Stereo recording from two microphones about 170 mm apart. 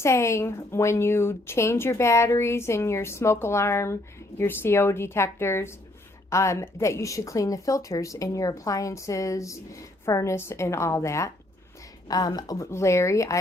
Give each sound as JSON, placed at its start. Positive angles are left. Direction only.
{"t": 0.0, "sound": "speech", "side_deg": 15}